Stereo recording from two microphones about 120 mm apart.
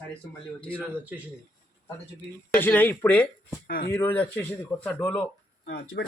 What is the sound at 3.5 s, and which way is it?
Speech, 20° left (ahead or behind).